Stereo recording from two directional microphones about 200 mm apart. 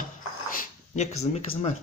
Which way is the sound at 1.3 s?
30° left (ahead or behind).